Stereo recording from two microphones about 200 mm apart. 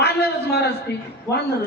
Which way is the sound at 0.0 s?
55° left (ahead or behind).